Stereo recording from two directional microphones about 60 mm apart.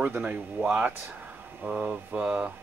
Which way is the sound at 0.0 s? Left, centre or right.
Right.